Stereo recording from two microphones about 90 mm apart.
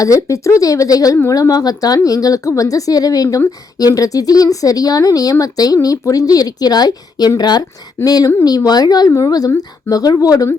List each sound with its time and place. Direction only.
0.0 s a woman's voice: 35° left (ahead or behind)